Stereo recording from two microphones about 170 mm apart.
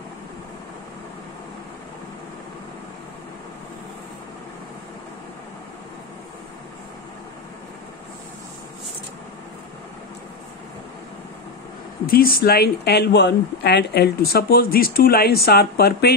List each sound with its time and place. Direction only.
12.1 s speech: 60° left (ahead or behind)